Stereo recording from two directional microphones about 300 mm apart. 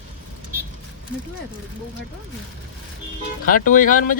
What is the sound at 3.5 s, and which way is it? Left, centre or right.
Speech, left.